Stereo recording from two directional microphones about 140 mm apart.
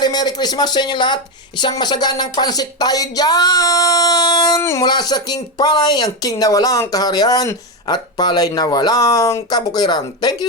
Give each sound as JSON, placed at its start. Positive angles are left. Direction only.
{"t": 0.0, "sound": "speech", "side_deg": 30}